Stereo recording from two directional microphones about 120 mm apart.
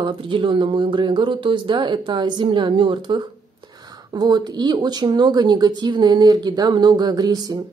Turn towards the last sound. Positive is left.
turn(degrees=-35)  # may be behind; listen again after turning